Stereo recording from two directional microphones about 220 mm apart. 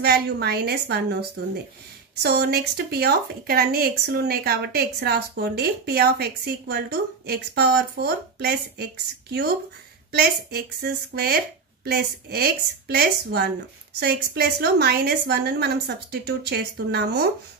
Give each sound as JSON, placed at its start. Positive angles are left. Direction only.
{"t": 0.0, "sound": "speech", "side_deg": -45}
{"t": 2.2, "sound": "speech", "side_deg": -45}